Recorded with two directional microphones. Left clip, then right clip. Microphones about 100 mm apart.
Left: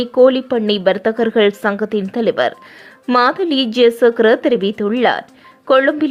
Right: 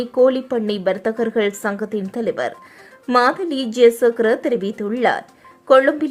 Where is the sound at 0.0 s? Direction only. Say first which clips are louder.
Left 4 dB; 15° left (ahead or behind).